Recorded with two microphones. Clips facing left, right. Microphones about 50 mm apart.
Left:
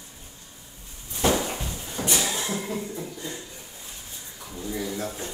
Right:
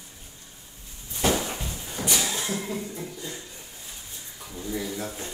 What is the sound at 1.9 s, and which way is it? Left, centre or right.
Music, left.